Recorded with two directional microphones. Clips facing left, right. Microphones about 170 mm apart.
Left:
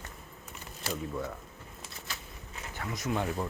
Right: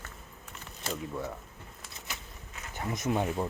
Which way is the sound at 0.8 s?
5° left (ahead or behind).